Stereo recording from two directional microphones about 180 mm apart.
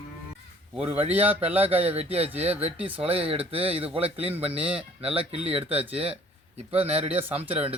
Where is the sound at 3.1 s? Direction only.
30° right (ahead or behind).